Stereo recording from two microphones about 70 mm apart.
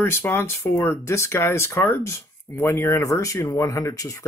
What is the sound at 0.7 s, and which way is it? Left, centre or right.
Speech, left.